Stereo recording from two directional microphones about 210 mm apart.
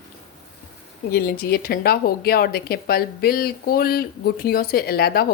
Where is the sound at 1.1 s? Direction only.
45° left (ahead or behind).